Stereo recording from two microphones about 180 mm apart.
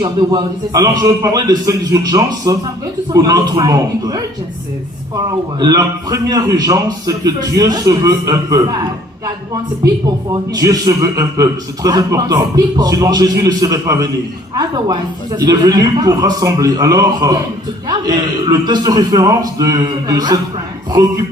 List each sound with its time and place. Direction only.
0.0 s a man's voice: 25° right (ahead or behind)
5.5 s a man's voice: 20° right (ahead or behind)
10.3 s a man's voice: 20° right (ahead or behind)